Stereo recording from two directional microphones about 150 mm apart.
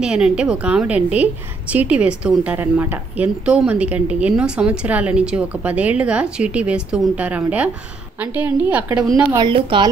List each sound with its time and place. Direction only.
0.0 s a woman's voice: 5° right (ahead or behind)
9.3 s a woman's voice: 30° right (ahead or behind)